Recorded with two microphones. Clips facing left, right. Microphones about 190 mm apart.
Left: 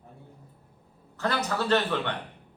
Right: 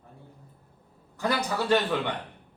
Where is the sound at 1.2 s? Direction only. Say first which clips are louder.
Right 1 dB; 10° right (ahead or behind).